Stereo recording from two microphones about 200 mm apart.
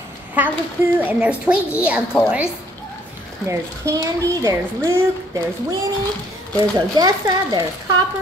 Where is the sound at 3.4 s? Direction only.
15° right (ahead or behind).